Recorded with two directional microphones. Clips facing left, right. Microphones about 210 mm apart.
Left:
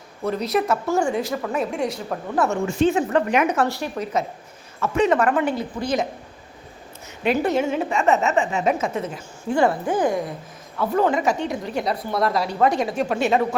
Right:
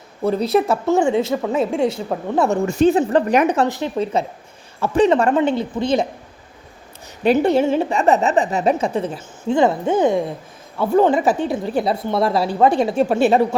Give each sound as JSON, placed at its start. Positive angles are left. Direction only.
{"t": 0.3, "sound": "a woman's voice", "side_deg": -30}
{"t": 2.5, "sound": "a woman's voice", "side_deg": -40}
{"t": 3.7, "sound": "a woman's voice", "side_deg": -20}
{"t": 7.3, "sound": "a woman's voice", "side_deg": -30}